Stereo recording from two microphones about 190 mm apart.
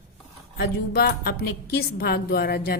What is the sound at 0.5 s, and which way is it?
A woman's voice, 60° left (ahead or behind).